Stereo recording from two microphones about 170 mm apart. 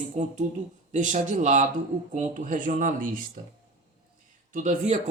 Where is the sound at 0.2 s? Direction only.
45° right (ahead or behind).